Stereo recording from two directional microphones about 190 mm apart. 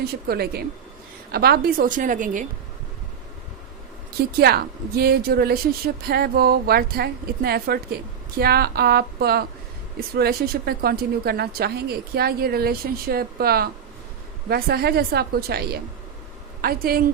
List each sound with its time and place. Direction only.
0.0 s speech: 55° right (ahead or behind)
4.3 s a woman's voice: 55° right (ahead or behind)